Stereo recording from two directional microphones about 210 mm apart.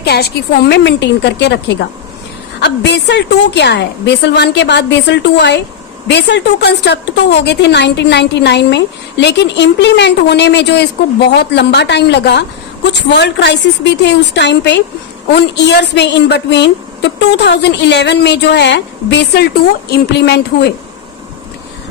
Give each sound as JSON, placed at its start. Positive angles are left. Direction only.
{"t": 0.0, "sound": "a woman's voice", "side_deg": 50}